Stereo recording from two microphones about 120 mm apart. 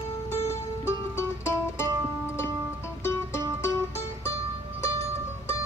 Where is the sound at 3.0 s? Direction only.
20° left (ahead or behind).